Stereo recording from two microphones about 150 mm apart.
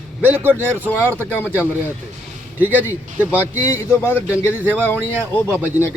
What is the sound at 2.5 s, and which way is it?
Speech, 10° right (ahead or behind).